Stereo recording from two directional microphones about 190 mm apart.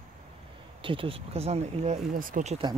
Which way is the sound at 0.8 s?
25° right (ahead or behind).